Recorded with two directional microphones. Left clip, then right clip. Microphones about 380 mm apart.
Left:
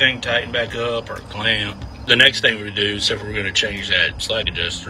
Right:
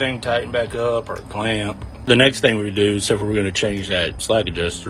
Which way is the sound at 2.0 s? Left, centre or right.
Centre.